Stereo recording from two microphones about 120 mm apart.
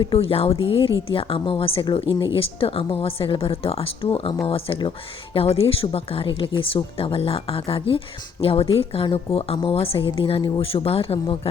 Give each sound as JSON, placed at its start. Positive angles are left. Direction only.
{"t": 0.0, "sound": "a woman's voice", "side_deg": 50}